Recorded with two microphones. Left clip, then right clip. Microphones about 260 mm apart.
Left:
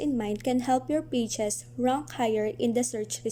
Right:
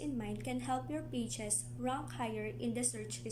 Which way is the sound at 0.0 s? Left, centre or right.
Left.